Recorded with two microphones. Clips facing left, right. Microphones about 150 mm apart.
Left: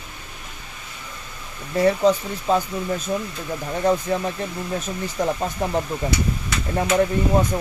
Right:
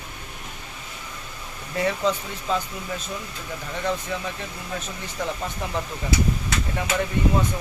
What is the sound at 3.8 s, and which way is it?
Speech, 45° left (ahead or behind).